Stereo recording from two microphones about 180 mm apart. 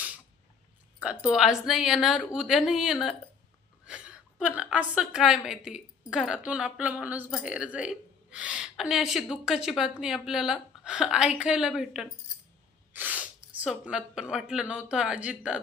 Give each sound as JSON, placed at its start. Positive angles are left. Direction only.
{"t": 0.9, "sound": "a woman's voice", "side_deg": -10}